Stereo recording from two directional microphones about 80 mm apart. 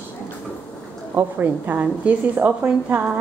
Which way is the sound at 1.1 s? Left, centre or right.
Right.